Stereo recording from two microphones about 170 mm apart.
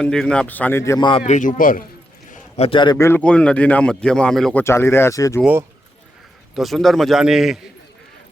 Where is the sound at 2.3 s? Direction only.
35° left (ahead or behind).